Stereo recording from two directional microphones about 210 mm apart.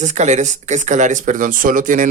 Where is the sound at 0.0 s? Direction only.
35° right (ahead or behind).